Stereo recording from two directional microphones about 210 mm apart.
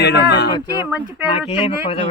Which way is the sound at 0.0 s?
50° left (ahead or behind).